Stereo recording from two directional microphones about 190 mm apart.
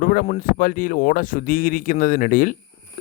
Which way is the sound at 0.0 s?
50° left (ahead or behind).